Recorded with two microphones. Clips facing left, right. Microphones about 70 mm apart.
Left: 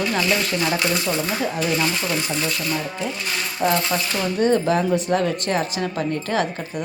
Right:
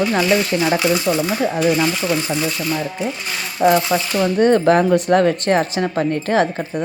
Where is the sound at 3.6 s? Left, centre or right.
Centre.